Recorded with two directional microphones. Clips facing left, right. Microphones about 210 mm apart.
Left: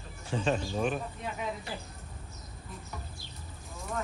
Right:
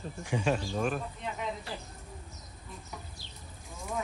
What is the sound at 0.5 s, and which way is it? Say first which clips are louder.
Speech: left 1 dB; centre (ahead or behind).